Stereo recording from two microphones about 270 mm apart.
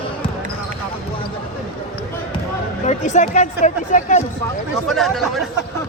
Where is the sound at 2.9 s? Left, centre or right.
Left.